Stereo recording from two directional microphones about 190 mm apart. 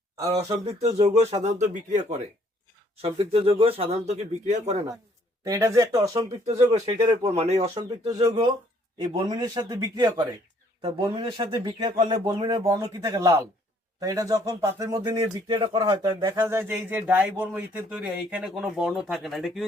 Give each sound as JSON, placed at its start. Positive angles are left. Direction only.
{"t": 0.8, "sound": "speech", "side_deg": -35}
{"t": 5.5, "sound": "speech", "side_deg": -15}
{"t": 6.4, "sound": "speech", "side_deg": -35}